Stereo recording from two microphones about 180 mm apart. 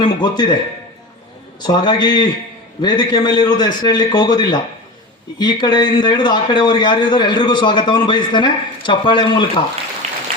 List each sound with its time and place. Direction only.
0.0 s a man's voice: 25° left (ahead or behind)
1.6 s a man's voice: 25° left (ahead or behind)
10.0 s a sound: 35° right (ahead or behind)